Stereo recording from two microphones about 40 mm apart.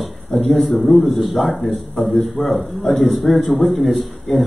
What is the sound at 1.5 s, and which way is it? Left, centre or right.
Speech, left.